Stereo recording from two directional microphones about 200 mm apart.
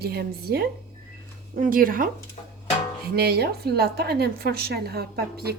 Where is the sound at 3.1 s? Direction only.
50° right (ahead or behind).